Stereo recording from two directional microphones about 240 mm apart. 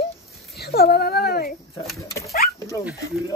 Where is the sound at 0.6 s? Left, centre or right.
Left.